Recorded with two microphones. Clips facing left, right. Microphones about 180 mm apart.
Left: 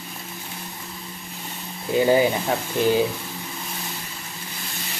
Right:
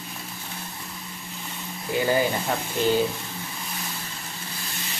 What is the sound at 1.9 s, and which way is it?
Speech, 20° left (ahead or behind).